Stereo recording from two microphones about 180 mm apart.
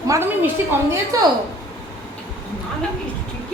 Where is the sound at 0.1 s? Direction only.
10° right (ahead or behind).